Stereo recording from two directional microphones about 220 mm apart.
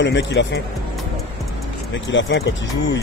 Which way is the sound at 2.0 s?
55° left (ahead or behind).